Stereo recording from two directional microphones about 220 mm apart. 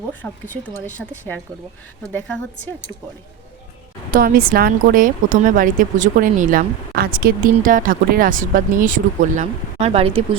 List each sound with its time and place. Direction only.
0.1 s a woman's voice: 5° left (ahead or behind)
4.1 s speech: 40° right (ahead or behind); by 10.2 s 25° right (ahead or behind)